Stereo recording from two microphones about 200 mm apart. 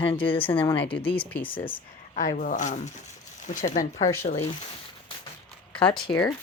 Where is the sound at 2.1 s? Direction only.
40° left (ahead or behind).